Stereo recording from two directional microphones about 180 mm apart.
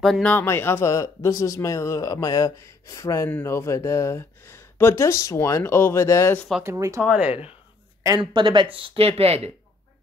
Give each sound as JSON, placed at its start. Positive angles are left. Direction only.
{"t": 0.0, "sound": "speech", "side_deg": 5}
{"t": 6.6, "sound": "speech", "side_deg": -15}
{"t": 8.0, "sound": "speech", "side_deg": -20}